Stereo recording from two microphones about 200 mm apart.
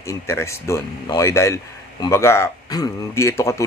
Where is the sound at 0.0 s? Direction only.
15° left (ahead or behind).